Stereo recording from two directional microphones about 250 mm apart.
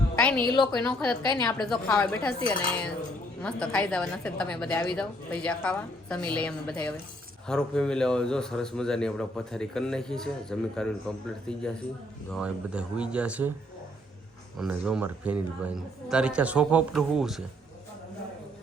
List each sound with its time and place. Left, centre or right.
0.2 s a sound: centre
0.5 s a woman's voice: centre
0.8 s a man's voice: centre
14.6 s a man's voice: centre